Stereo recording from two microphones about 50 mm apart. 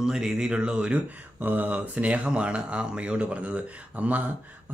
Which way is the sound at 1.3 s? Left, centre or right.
Right.